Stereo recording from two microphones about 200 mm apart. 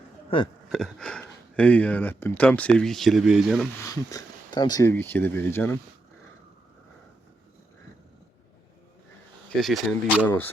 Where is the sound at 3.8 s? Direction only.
15° left (ahead or behind).